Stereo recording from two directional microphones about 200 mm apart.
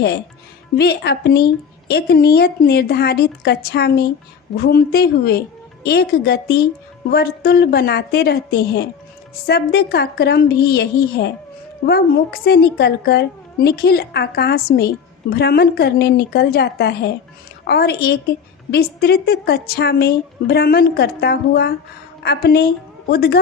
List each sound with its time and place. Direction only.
0.8 s a woman's voice: 55° left (ahead or behind)